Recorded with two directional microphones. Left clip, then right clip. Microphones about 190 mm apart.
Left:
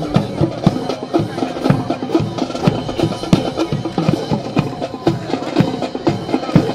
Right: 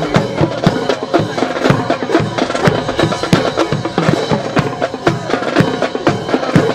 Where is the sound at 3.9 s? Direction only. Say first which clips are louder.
Right 5 dB; 20° right (ahead or behind).